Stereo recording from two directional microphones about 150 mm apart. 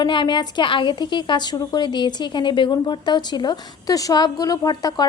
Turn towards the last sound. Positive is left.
turn(degrees=25)  # may be behind; listen again after turning